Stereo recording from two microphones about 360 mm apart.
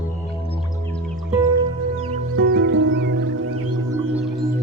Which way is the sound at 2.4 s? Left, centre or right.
Right.